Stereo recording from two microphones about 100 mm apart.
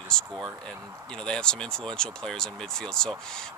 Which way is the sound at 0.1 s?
10° left (ahead or behind).